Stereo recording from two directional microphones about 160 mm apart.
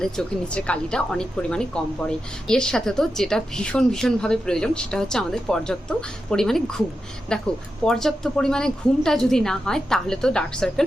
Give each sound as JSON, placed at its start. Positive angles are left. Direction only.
{"t": 0.0, "sound": "a woman's voice", "side_deg": 5}